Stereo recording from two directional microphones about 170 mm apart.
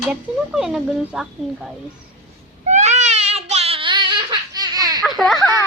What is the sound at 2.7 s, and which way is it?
Baby cry, 45° right (ahead or behind).